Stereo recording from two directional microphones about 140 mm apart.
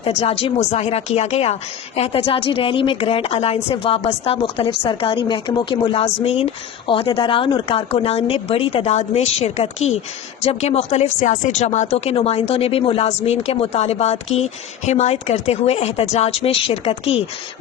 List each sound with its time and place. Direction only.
0.0 s a woman's voice: 45° left (ahead or behind)
11.2 s speech: 75° left (ahead or behind)
11.5 s speech: 55° left (ahead or behind)